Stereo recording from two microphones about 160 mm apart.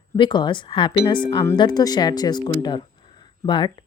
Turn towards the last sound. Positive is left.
turn(degrees=30)  # may be behind; listen again after turning